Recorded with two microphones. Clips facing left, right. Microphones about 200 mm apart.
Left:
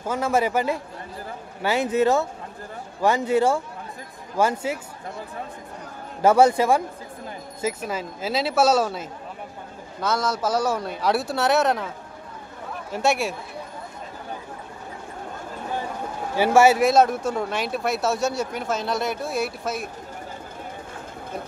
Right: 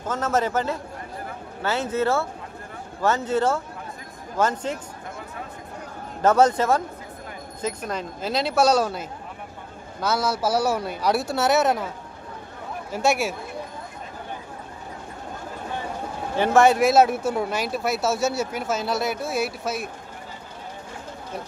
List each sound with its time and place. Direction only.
0.0 s a man's voice: 10° left (ahead or behind)
6.2 s a man's voice: 10° left (ahead or behind)
12.9 s speech: centre (ahead or behind)
16.3 s speech: 5° left (ahead or behind)